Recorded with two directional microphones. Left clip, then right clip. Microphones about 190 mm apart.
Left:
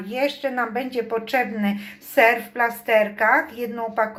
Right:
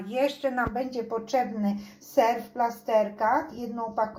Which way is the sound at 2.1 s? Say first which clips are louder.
Left 6 dB; 15° left (ahead or behind).